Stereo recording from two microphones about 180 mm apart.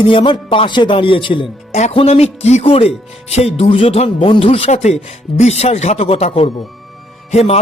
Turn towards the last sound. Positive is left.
turn(degrees=35)  # may be behind; listen again after turning